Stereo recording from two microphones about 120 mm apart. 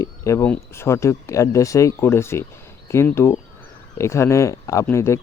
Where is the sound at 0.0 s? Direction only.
25° left (ahead or behind).